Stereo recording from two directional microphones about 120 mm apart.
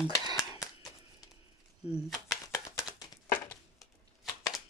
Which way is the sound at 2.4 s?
25° left (ahead or behind).